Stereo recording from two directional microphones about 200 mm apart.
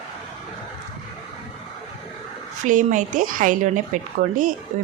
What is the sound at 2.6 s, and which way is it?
A woman's voice, 40° right (ahead or behind).